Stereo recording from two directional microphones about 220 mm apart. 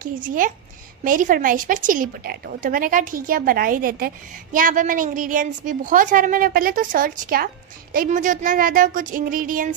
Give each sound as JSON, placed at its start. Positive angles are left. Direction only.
{"t": 0.0, "sound": "a woman's voice", "side_deg": -35}